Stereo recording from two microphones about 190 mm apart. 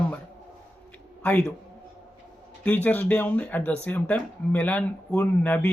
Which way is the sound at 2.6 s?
10° left (ahead or behind).